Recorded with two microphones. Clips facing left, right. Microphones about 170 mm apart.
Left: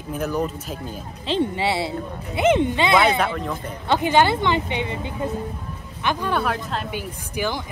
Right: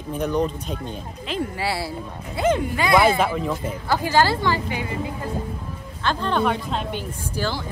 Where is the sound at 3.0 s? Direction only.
Centre (ahead or behind).